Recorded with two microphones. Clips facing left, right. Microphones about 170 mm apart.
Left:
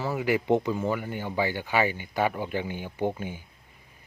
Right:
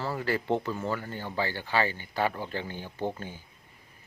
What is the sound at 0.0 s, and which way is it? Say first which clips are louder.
Speech: left 4 dB; 10° left (ahead or behind).